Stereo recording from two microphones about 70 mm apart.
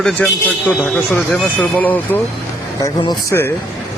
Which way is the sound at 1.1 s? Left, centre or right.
Left.